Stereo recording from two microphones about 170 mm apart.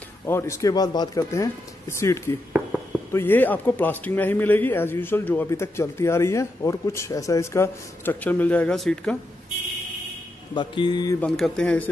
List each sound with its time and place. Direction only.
0.3 s a man's voice: 15° left (ahead or behind)
10.5 s speech: 25° left (ahead or behind)
11.1 s speech: 5° left (ahead or behind)